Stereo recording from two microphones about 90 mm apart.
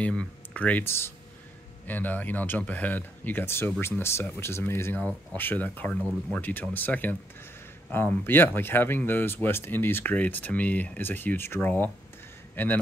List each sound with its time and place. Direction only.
0.0 s speech: 10° left (ahead or behind)
1.9 s speech: 20° left (ahead or behind)
5.9 s speech: 5° left (ahead or behind)
6.7 s a man's voice: 20° left (ahead or behind)